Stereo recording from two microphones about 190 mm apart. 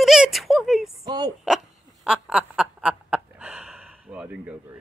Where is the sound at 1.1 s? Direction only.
20° right (ahead or behind).